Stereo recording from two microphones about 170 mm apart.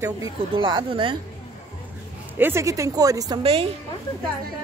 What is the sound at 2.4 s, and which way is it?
Speech, 15° right (ahead or behind).